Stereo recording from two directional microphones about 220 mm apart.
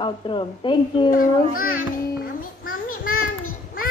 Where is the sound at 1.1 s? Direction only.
40° left (ahead or behind).